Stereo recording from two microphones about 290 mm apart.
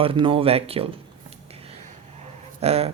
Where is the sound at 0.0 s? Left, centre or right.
Centre.